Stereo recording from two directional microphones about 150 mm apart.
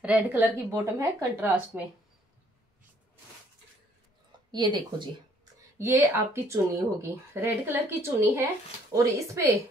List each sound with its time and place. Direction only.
0.0 s speech: 10° right (ahead or behind)
4.5 s speech: 30° right (ahead or behind)
5.8 s speech: 20° right (ahead or behind)